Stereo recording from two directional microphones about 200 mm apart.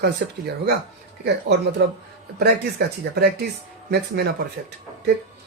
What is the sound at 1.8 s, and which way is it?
Speech, 55° right (ahead or behind).